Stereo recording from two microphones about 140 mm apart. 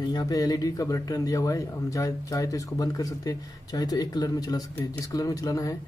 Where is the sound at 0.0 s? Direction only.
30° left (ahead or behind).